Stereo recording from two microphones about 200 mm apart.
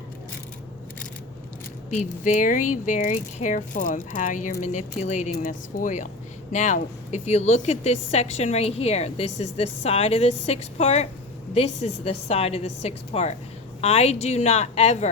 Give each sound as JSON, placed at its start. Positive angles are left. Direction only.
{"t": 2.0, "sound": "a woman's voice", "side_deg": 40}